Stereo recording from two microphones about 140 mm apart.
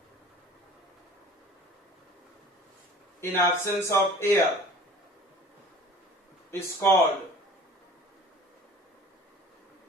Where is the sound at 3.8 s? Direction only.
20° left (ahead or behind).